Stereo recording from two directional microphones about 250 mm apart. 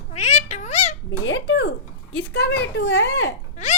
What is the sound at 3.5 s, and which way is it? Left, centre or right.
Hiccup, left.